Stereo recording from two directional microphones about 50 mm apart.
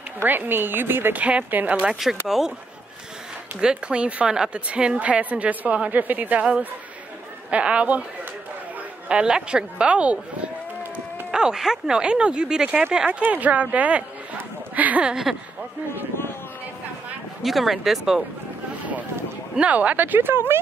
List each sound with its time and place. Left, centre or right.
0.2 s a woman's voice: right
1.1 s speech: right
2.2 s speech: centre
3.6 s speech: right
7.5 s speech: right
9.1 s speech: centre
11.3 s speech: centre
13.2 s speech: right
15.3 s speech: centre
17.4 s speech: centre
19.6 s speech: right